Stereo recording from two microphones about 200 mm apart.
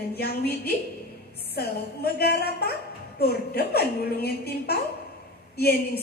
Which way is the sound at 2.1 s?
50° left (ahead or behind).